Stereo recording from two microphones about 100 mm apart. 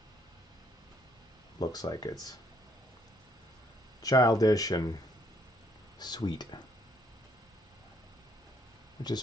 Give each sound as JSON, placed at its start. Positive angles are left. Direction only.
{"t": 1.6, "sound": "speech", "side_deg": 40}
{"t": 4.0, "sound": "speech", "side_deg": 35}
{"t": 5.9, "sound": "speech", "side_deg": 45}